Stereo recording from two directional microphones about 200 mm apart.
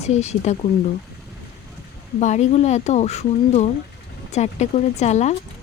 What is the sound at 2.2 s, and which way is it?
Speech, 35° left (ahead or behind).